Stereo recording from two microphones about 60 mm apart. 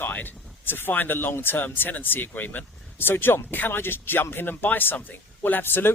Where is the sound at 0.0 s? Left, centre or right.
Left.